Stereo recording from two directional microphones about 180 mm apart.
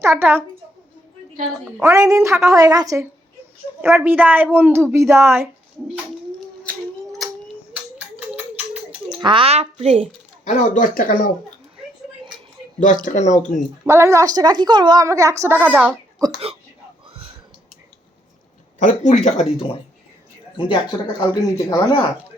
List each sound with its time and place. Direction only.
0.0 s a woman's voice: 15° right (ahead or behind)
1.8 s a woman's voice: 15° right (ahead or behind)
6.7 s a sound: centre (ahead or behind)
9.2 s speech: 30° right (ahead or behind)
10.4 s speech: 40° left (ahead or behind)
12.8 s speech: 45° left (ahead or behind)
13.8 s a woman's voice: 15° right (ahead or behind)
16.2 s a sound: 20° right (ahead or behind)
18.8 s speech: 40° left (ahead or behind); by 22.0 s 20° left (ahead or behind)